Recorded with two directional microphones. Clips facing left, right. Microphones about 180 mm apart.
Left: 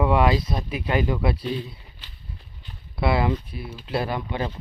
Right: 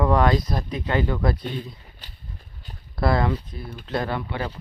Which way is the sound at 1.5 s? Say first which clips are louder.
Even; 45° right (ahead or behind).